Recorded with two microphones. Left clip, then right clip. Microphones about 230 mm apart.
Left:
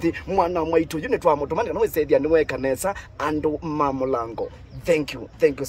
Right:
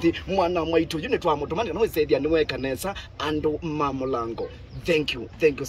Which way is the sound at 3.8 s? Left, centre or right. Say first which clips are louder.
Left 6 dB; left.